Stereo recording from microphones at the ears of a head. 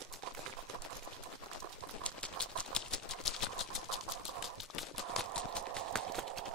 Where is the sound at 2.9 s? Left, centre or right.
Left.